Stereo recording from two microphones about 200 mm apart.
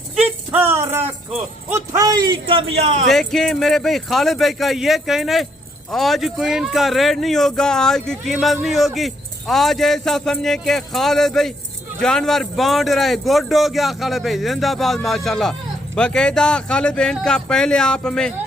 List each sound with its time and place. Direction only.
0.2 s a sound: 10° right (ahead or behind)
1.7 s a man's voice: 15° right (ahead or behind); by 3.0 s 30° right (ahead or behind)
3.1 s speech: centre (ahead or behind)